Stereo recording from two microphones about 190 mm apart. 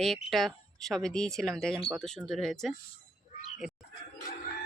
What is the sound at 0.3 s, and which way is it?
Speech, centre (ahead or behind).